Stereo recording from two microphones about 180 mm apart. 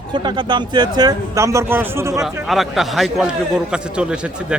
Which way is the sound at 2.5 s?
Centre (ahead or behind).